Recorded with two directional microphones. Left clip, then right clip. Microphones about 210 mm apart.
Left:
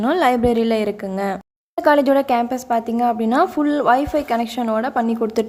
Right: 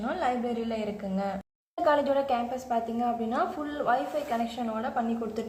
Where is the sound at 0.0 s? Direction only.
40° left (ahead or behind).